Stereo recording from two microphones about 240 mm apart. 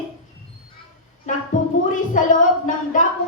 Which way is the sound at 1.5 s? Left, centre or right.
Left.